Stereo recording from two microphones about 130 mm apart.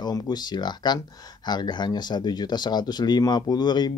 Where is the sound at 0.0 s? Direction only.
30° left (ahead or behind).